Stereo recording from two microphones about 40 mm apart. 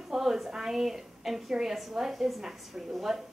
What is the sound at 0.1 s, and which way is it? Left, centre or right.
A woman's voice, centre.